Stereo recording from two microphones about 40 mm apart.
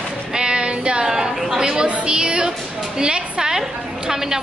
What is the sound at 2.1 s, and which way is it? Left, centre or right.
Music, right.